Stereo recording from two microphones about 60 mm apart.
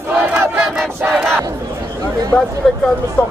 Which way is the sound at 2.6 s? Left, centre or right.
Centre.